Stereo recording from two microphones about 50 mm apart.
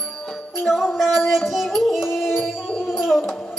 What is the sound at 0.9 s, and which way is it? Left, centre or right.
Music, centre.